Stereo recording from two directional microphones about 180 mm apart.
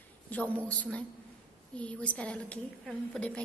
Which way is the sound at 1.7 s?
5° left (ahead or behind).